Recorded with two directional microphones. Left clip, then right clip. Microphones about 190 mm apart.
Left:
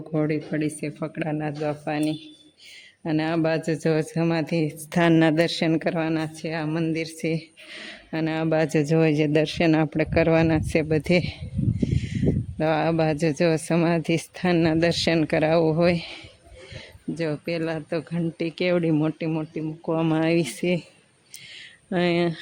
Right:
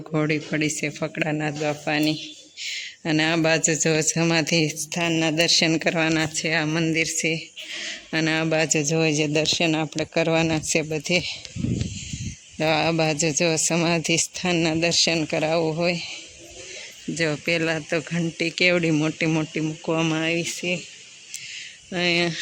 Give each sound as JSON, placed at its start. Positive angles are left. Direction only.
{"t": 0.1, "sound": "a man's voice", "side_deg": -5}
{"t": 4.9, "sound": "speech", "side_deg": 25}
{"t": 12.5, "sound": "speech", "side_deg": 10}
{"t": 17.2, "sound": "a man's voice", "side_deg": 0}
{"t": 19.3, "sound": "a man's voice", "side_deg": -5}
{"t": 20.4, "sound": "speech", "side_deg": 35}
{"t": 21.8, "sound": "speech", "side_deg": 20}